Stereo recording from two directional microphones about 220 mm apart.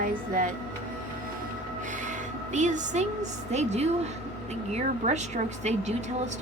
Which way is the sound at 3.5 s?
30° right (ahead or behind).